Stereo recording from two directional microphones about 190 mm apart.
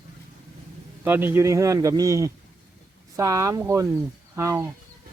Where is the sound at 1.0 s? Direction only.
10° right (ahead or behind).